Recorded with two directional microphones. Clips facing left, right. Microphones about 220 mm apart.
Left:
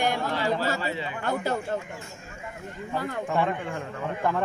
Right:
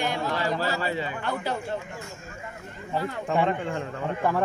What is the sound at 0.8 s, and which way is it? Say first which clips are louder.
Speech: right 2 dB; 45° right (ahead or behind).